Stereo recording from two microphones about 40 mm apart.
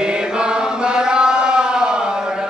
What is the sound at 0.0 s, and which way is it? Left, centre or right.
Chant, right.